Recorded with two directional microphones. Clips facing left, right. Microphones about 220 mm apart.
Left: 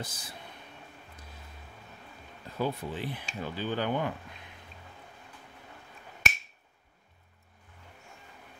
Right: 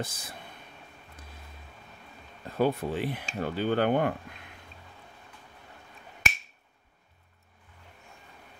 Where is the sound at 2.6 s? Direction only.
65° right (ahead or behind).